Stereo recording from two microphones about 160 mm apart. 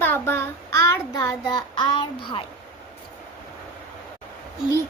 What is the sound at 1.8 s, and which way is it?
Child singing, 30° left (ahead or behind).